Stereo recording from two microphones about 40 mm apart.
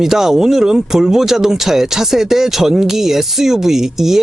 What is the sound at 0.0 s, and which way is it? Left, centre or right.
Speech, centre.